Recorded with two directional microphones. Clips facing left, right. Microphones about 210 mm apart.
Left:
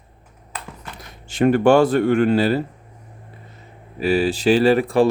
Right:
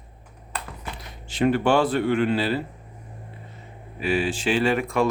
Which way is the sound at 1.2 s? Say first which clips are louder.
Left 6 dB; 45° left (ahead or behind).